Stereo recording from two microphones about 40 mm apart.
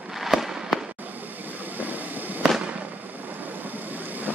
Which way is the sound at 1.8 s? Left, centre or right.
Right.